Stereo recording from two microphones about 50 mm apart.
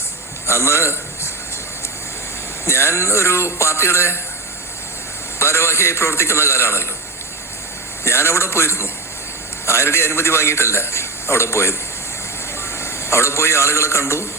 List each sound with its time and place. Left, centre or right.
0.4 s a man's voice: left
2.6 s a man's voice: left
5.4 s a man's voice: left
8.0 s a man's voice: left